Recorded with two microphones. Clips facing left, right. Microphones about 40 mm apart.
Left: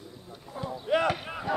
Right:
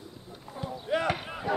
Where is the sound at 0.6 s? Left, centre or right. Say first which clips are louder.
Left 1 dB; centre.